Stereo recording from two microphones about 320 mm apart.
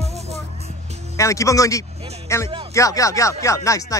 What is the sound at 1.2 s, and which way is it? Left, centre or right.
Speech, centre.